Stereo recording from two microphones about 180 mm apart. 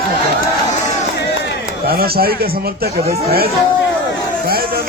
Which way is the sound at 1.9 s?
60° right (ahead or behind).